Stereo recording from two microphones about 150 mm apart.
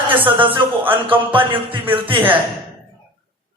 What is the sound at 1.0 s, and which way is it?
Speech, 35° right (ahead or behind).